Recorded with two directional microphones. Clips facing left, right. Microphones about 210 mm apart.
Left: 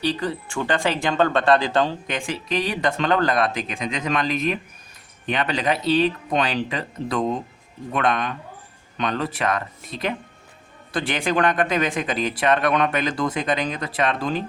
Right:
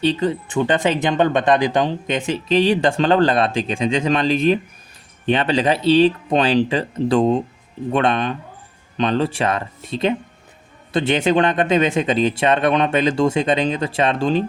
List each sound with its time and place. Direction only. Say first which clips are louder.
0.0 s speech: right 6 dB; 25° right (ahead or behind)